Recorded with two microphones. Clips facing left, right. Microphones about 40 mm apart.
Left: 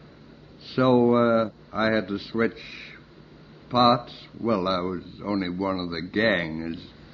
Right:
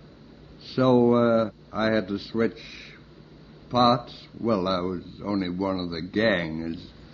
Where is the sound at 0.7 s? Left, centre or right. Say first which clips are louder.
Even; left.